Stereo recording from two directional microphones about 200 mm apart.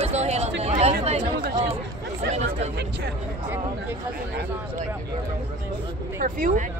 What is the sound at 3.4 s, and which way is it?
Speech, 10° right (ahead or behind).